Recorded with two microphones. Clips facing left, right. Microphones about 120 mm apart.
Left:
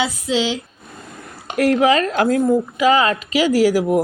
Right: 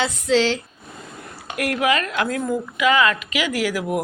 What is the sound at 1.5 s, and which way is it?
Speech, 25° left (ahead or behind).